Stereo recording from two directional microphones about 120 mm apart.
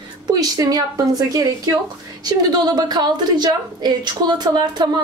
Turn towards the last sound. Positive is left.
turn(degrees=-35)  # may be behind; listen again after turning